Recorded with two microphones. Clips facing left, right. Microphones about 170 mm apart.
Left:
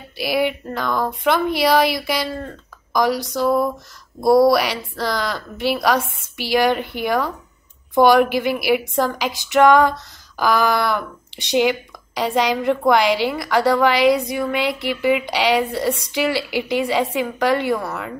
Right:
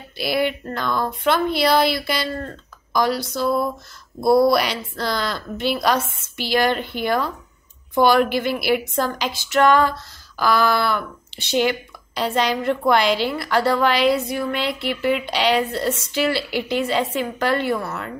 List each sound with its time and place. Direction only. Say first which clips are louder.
0.2 s a woman's voice: left 1 dB; 10° left (ahead or behind)